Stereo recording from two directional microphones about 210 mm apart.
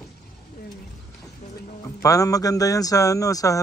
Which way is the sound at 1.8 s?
15° left (ahead or behind).